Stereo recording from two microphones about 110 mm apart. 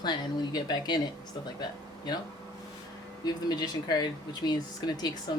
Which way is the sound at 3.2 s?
40° left (ahead or behind).